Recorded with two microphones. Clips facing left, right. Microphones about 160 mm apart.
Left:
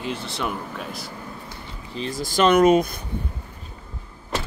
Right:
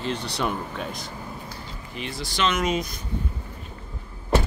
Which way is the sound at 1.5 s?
30° left (ahead or behind).